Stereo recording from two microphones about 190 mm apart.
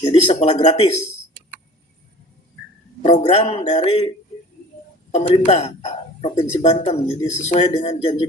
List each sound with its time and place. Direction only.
0.0 s speech: 35° left (ahead or behind)
3.0 s speech: 35° left (ahead or behind)
5.5 s speech: 35° left (ahead or behind)